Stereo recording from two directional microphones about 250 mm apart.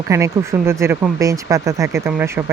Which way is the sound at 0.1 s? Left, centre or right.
Centre.